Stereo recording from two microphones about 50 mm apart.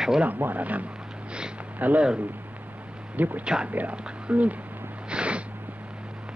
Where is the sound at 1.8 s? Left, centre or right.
Right.